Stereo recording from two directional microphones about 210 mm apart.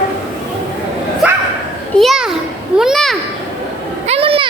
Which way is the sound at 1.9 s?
Centre (ahead or behind).